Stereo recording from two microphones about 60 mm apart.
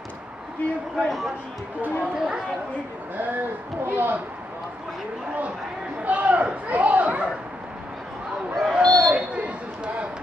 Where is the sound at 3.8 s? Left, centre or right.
Right.